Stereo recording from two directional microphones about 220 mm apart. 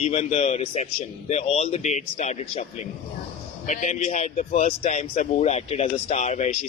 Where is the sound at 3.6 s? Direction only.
35° left (ahead or behind).